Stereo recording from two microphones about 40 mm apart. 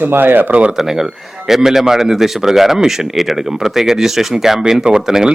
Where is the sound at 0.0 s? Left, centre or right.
Right.